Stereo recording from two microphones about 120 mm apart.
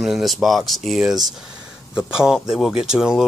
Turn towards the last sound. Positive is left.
turn(degrees=-5)  # may be behind; listen again after turning